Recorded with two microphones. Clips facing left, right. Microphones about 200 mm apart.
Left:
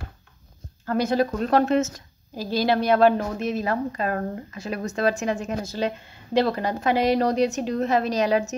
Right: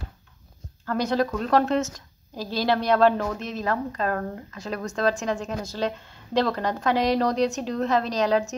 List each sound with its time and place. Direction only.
0.8 s a woman's voice: 5° left (ahead or behind)